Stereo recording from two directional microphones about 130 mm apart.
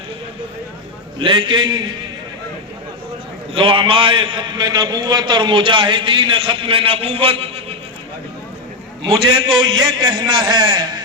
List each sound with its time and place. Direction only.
1.2 s a man's voice: 40° right (ahead or behind)
3.5 s a man's voice: 40° right (ahead or behind)
9.0 s a man's voice: 40° right (ahead or behind)